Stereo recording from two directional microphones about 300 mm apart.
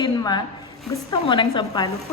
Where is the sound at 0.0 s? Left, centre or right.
Centre.